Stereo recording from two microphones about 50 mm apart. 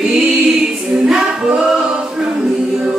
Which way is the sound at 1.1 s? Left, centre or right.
Centre.